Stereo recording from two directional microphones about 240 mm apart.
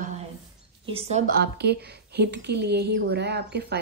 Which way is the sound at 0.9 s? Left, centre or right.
Right.